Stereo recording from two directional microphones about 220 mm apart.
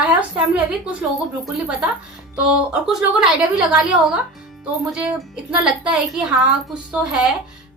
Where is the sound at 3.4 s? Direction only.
5° right (ahead or behind).